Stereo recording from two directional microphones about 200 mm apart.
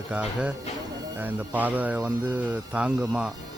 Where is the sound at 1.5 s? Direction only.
10° right (ahead or behind).